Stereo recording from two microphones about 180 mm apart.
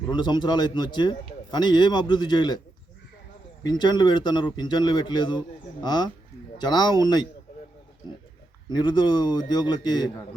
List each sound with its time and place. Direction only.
0.1 s speech: 25° left (ahead or behind)
3.6 s speech: 25° left (ahead or behind)
8.7 s speech: 25° left (ahead or behind)